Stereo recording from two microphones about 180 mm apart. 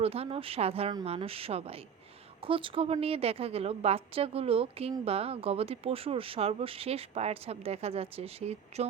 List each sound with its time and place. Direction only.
0.0 s a woman's voice: 35° right (ahead or behind)